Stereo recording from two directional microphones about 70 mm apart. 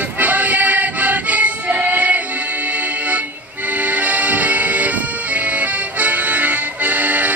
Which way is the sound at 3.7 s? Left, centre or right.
Right.